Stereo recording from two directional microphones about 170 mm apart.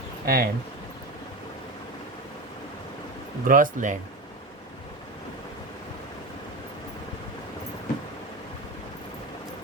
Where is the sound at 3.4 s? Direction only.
55° right (ahead or behind).